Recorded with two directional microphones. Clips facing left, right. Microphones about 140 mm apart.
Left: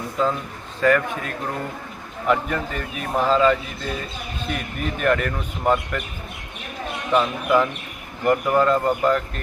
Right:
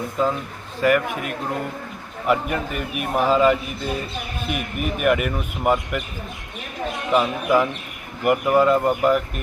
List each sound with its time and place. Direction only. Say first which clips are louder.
0.8 s a man's voice: even; 15° right (ahead or behind)
7.1 s a man's voice: even; 10° right (ahead or behind)